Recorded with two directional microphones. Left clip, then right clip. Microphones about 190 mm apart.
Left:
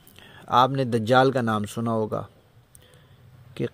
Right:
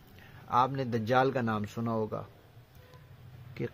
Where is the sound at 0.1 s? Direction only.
40° left (ahead or behind).